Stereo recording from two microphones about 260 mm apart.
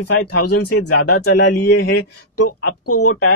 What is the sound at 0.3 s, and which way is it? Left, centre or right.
Speech, left.